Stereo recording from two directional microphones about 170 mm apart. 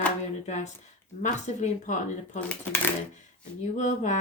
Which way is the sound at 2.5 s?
10° left (ahead or behind).